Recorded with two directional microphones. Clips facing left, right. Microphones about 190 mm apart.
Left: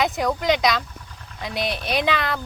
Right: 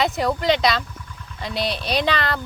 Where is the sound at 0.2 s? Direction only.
Centre (ahead or behind).